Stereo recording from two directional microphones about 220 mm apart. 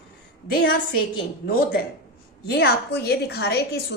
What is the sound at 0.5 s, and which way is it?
A woman's voice, 45° left (ahead or behind).